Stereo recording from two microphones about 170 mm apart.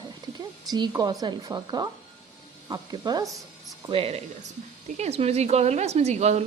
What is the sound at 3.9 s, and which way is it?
A woman's voice, 35° right (ahead or behind).